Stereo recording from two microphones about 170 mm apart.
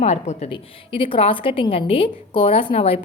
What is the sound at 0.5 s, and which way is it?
A woman's voice, 30° left (ahead or behind).